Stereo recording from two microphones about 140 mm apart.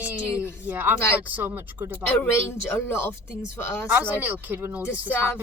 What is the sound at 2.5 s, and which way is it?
Speech, 15° left (ahead or behind).